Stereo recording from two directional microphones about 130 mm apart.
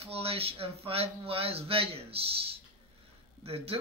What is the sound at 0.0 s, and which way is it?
Speech, 50° right (ahead or behind).